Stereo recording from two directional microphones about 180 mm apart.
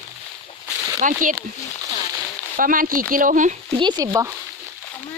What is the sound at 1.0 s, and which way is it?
Speech, 45° right (ahead or behind).